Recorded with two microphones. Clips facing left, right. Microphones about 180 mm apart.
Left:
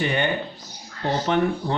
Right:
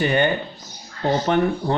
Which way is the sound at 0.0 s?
45° right (ahead or behind).